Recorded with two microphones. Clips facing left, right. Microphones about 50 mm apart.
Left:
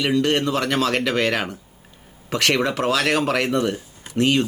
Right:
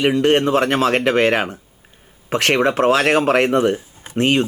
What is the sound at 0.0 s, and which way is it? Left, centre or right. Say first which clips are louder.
A man's voice: right 5 dB; right.